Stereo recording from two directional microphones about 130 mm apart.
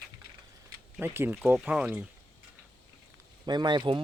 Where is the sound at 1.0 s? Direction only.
15° right (ahead or behind).